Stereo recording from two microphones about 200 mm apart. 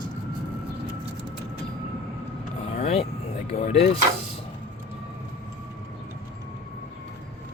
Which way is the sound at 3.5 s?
30° left (ahead or behind).